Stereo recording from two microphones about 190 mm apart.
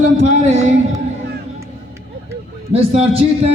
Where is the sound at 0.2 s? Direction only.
35° right (ahead or behind).